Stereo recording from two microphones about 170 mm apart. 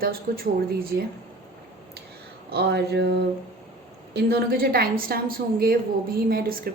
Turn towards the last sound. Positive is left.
turn(degrees=-60)  # may be behind; listen again after turning